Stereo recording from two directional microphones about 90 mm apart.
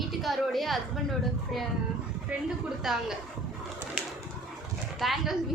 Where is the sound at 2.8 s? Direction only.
5° right (ahead or behind).